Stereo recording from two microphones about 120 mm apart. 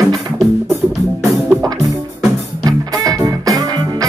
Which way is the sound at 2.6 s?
30° right (ahead or behind).